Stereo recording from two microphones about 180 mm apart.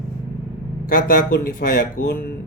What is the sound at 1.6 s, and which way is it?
Speech, 55° left (ahead or behind).